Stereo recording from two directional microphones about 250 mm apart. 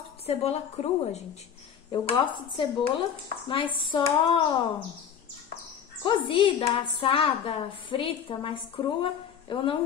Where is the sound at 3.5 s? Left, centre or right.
Centre.